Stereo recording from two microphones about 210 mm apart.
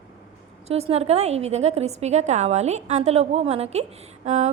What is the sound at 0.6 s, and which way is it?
A woman's voice, 30° right (ahead or behind).